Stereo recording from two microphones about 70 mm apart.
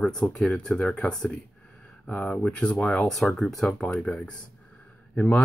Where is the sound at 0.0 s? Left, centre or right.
Centre.